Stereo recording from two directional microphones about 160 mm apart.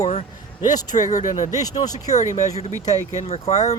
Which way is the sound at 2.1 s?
50° left (ahead or behind).